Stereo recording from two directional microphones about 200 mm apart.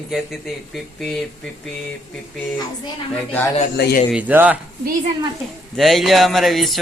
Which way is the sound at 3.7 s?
55° left (ahead or behind).